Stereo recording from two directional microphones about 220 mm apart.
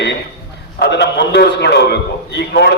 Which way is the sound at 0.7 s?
50° left (ahead or behind).